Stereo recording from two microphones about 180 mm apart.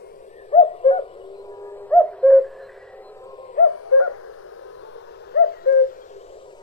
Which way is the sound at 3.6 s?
50° left (ahead or behind).